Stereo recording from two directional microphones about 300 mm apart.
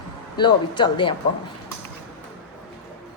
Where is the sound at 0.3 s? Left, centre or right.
Centre.